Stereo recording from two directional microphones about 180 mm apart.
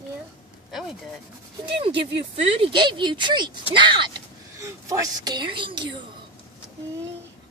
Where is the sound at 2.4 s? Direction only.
30° right (ahead or behind).